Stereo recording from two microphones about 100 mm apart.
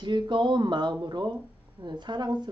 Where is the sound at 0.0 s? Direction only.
50° right (ahead or behind).